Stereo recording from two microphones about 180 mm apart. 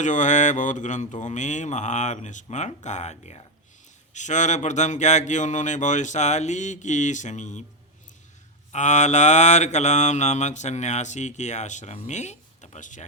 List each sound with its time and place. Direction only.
0.0 s speech: 45° left (ahead or behind)
8.7 s mantra: 40° left (ahead or behind)